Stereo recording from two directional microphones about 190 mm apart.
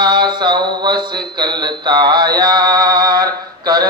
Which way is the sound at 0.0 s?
20° right (ahead or behind).